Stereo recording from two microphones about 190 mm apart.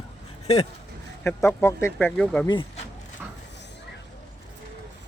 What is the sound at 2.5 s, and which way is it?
Speech, 25° left (ahead or behind).